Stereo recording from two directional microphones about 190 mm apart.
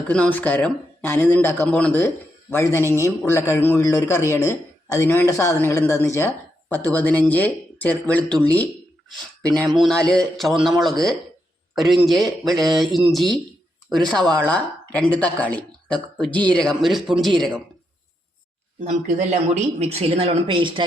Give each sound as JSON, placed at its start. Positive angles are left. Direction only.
{"t": 0.1, "sound": "speech", "side_deg": 10}
{"t": 8.4, "sound": "a sound", "side_deg": 10}
{"t": 9.6, "sound": "speech", "side_deg": 0}
{"t": 18.8, "sound": "speech", "side_deg": -40}